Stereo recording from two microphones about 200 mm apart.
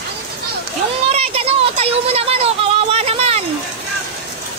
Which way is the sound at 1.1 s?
30° right (ahead or behind).